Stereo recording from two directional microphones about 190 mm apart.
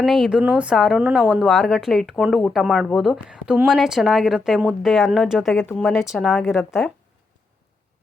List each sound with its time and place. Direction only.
0.0 s speech: centre (ahead or behind)